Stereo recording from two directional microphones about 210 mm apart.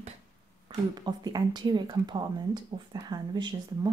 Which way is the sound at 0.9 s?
20° right (ahead or behind).